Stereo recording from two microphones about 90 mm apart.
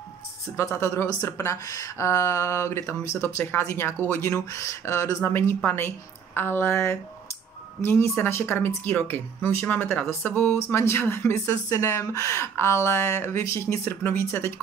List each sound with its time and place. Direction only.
0.6 s speech: 35° left (ahead or behind)